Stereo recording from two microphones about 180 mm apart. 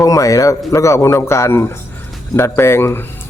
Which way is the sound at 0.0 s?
20° left (ahead or behind).